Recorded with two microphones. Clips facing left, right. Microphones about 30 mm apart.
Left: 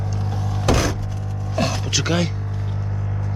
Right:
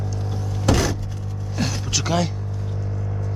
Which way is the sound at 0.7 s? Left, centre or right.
Centre.